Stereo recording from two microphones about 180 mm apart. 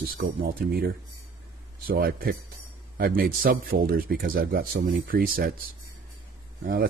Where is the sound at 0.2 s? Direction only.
55° right (ahead or behind).